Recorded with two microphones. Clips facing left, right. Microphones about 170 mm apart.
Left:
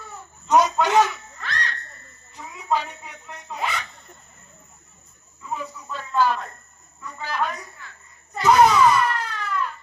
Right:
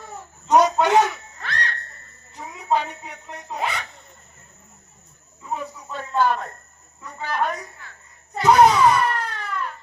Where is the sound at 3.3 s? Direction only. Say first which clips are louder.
Right 1 dB; 45° right (ahead or behind).